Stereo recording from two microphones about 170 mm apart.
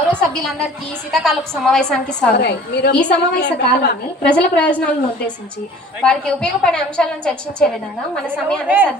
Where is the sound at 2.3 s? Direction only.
75° left (ahead or behind).